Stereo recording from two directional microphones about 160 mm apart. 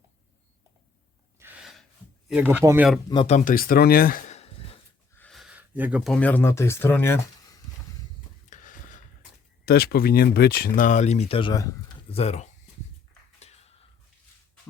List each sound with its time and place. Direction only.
1.4 s gasp: 10° right (ahead or behind)
2.3 s speech: 10° right (ahead or behind)
3.1 s speech: 30° left (ahead or behind)
3.3 s speech: 60° left (ahead or behind); by 4.8 s 35° left (ahead or behind)
5.3 s a sound: 5° right (ahead or behind)
6.1 s speech: 10° left (ahead or behind)
8.4 s a sound: 50° left (ahead or behind)
9.6 s speech: 80° left; by 12.5 s 40° left (ahead or behind)
13.4 s a sound: 40° left (ahead or behind)